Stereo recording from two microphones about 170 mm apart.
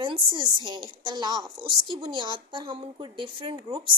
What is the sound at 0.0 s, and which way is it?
A woman's voice, 30° right (ahead or behind).